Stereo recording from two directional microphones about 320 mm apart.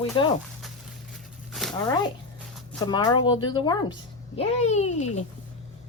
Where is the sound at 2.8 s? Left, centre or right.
Centre.